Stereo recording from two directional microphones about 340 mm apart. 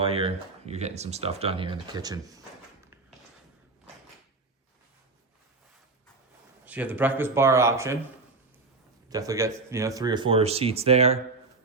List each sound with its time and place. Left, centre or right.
0.0 s speech: centre
6.7 s speech: centre
9.0 s speech: centre